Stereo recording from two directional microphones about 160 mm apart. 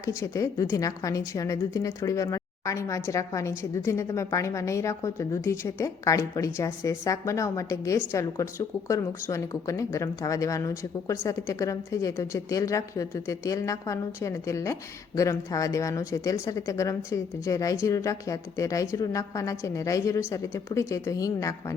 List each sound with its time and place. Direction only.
0.0 s a woman's voice: 20° left (ahead or behind)